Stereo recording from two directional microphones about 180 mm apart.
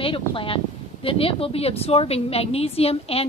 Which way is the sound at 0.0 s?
30° left (ahead or behind).